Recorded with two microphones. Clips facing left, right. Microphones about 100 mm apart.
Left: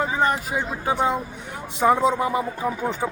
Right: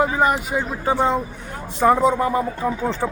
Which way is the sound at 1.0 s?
10° left (ahead or behind).